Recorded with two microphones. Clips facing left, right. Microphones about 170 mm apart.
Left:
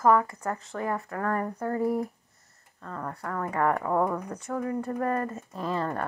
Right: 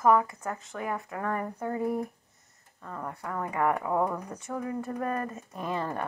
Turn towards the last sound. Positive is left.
turn(degrees=-15)  # may be behind; listen again after turning